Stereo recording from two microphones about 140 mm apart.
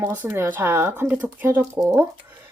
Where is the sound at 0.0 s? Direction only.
10° right (ahead or behind).